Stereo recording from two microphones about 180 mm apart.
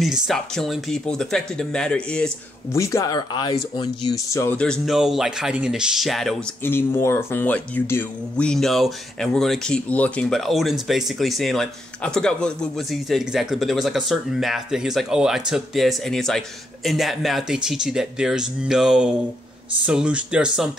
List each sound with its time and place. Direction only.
0.0 s speech: centre (ahead or behind)
2.7 s speech: 15° left (ahead or behind)
4.6 s speech: centre (ahead or behind)
6.6 s speech: 10° left (ahead or behind); by 20.7 s 5° right (ahead or behind)